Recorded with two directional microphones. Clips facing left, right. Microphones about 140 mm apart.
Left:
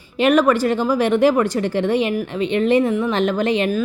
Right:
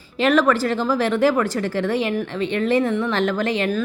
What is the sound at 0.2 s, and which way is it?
A woman's voice, 15° left (ahead or behind).